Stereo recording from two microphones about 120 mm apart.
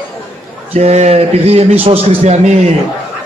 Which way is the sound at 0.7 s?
65° right (ahead or behind).